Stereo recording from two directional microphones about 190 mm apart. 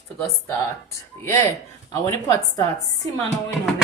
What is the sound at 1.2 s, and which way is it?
Speech, 15° left (ahead or behind).